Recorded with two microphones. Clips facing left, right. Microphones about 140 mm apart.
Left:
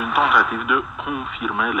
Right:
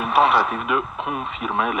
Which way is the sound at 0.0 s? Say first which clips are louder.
Right 2 dB; 30° right (ahead or behind).